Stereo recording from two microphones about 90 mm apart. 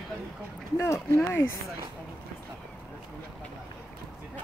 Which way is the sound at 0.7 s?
30° left (ahead or behind).